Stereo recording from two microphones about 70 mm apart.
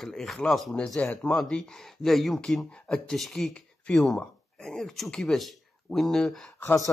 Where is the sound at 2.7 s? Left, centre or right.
Centre.